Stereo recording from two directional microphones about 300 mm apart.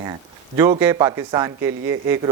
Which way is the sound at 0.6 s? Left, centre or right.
Centre.